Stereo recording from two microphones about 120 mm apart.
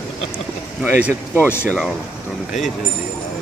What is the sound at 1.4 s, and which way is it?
Speech, 15° left (ahead or behind).